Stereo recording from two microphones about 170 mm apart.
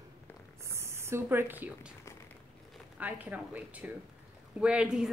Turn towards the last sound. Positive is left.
turn(degrees=-5)  # may be behind; listen again after turning